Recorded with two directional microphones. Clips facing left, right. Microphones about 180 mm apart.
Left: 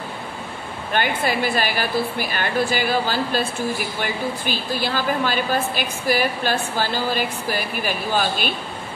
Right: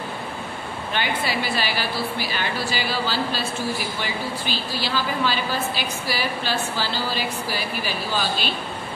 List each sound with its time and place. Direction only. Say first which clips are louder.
0.9 s a woman's voice: left 4 dB; 50° left (ahead or behind)